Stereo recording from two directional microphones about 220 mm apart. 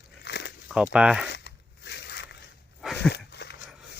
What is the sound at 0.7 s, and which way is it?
Speech, 5° right (ahead or behind).